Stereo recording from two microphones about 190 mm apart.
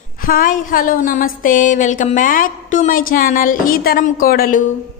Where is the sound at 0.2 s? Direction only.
50° left (ahead or behind).